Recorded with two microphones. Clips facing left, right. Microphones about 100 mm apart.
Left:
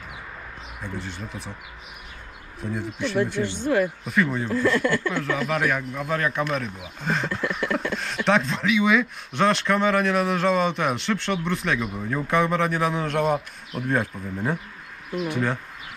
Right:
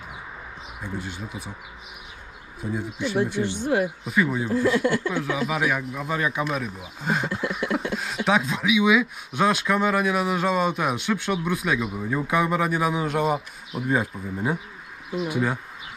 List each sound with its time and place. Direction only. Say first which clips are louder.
0.8 s speech: right 1 dB; 5° right (ahead or behind)
2.6 s speech: even; 5° right (ahead or behind)
4.6 s speech: even; 60° left (ahead or behind)
5.1 s speech: left 1 dB; 5° right (ahead or behind)